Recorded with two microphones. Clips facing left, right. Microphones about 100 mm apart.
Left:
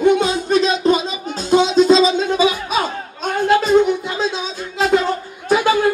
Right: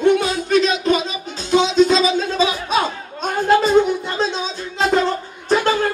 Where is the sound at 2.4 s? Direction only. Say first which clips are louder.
Left 1 dB; 5° left (ahead or behind).